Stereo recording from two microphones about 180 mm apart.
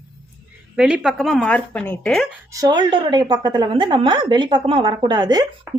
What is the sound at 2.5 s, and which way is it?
A woman's voice, 20° right (ahead or behind).